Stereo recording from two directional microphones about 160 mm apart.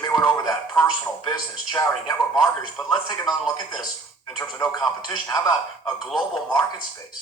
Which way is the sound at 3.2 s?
Centre (ahead or behind).